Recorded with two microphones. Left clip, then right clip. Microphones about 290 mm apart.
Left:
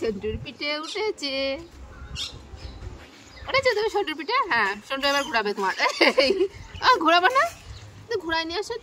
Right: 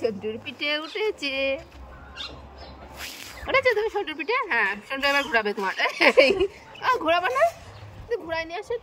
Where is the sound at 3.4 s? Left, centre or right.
Left.